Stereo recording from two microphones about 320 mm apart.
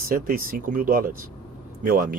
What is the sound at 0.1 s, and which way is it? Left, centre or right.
Speech, right.